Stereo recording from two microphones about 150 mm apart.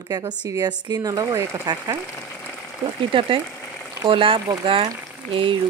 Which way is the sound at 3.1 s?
35° right (ahead or behind).